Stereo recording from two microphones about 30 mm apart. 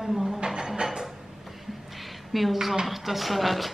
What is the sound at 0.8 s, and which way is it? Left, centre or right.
Speech, centre.